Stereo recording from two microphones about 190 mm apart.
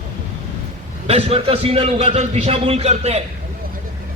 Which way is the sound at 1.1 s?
30° right (ahead or behind).